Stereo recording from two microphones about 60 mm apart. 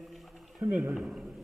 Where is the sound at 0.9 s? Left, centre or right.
Centre.